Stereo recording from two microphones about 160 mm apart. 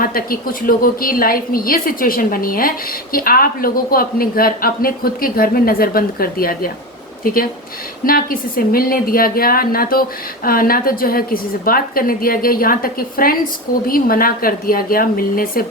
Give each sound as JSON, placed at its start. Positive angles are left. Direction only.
{"t": 0.0, "sound": "a woman's voice", "side_deg": 65}
{"t": 8.0, "sound": "a woman's voice", "side_deg": 65}